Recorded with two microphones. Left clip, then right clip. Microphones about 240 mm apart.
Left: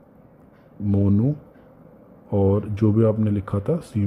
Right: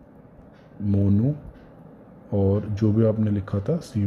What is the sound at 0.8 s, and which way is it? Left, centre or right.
A man's voice, centre.